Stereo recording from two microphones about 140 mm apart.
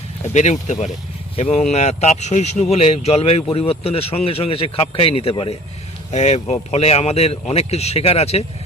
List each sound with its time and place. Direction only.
0.3 s speech: 55° left (ahead or behind)
6.1 s speech: 50° left (ahead or behind)